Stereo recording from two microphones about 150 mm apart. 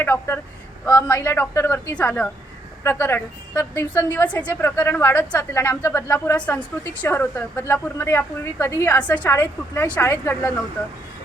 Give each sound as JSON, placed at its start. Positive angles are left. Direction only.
{"t": 0.0, "sound": "a woman's voice", "side_deg": 15}